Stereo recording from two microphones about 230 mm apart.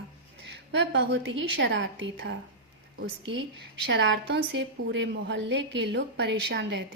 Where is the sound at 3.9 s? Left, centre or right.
Right.